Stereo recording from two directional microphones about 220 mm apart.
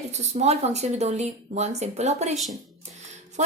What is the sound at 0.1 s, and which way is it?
A woman's voice, 30° right (ahead or behind).